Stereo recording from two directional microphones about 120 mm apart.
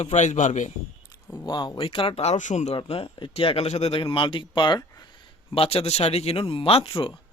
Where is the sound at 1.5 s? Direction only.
40° left (ahead or behind); by 2.7 s 85° left.